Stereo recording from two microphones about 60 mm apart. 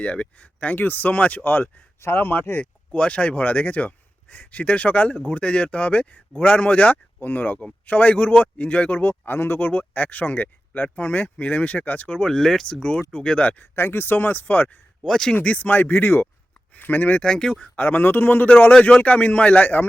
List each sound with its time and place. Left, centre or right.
0.0 s a man's voice: left
2.0 s a man's voice: left
2.9 s a man's voice: left
12.3 s a man's voice: centre; by 13.7 s left
13.7 s speech: left
15.0 s speech: centre
15.4 s a man's voice: left
17.2 s speech: centre
17.7 s speech: left
18.4 s a man's voice: left